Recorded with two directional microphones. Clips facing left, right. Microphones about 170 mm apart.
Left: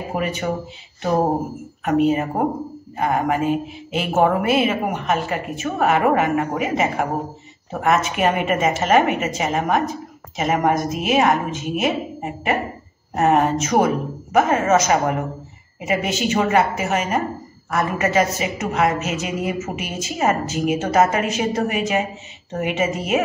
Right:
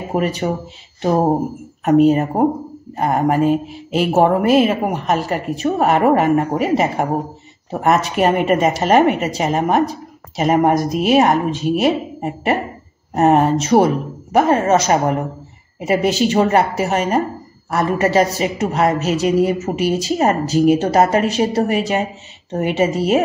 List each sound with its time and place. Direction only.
0.2 s a woman's voice: 35° right (ahead or behind)
1.9 s a woman's voice: 40° right (ahead or behind)